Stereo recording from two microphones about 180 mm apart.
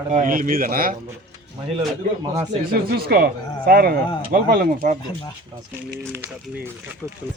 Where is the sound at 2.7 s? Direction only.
55° right (ahead or behind).